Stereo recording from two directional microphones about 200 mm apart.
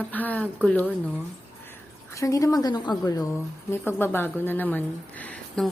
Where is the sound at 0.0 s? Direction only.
10° left (ahead or behind).